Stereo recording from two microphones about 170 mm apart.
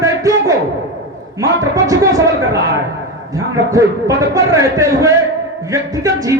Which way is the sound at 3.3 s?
20° right (ahead or behind).